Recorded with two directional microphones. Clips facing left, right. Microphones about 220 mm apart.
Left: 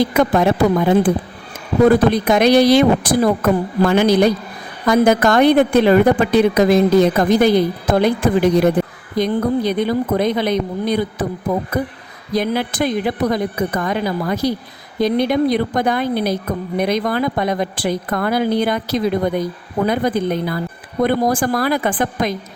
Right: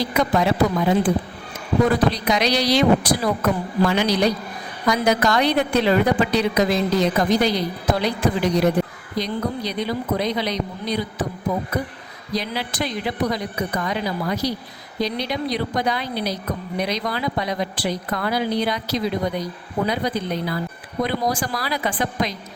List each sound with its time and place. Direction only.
0.0 s a woman's voice: 50° left (ahead or behind)
12.3 s a woman's voice: 50° left (ahead or behind)